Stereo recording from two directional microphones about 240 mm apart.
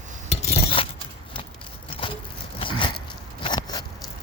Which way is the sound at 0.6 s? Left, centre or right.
Left.